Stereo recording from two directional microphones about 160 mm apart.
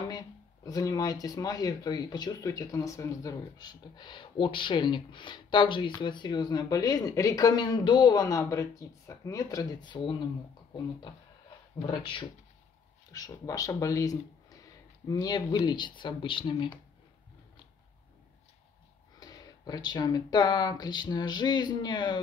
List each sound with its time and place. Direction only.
0.7 s speech: 20° left (ahead or behind)
19.1 s speech: 25° left (ahead or behind)